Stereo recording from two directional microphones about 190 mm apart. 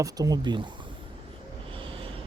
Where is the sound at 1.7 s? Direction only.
25° right (ahead or behind).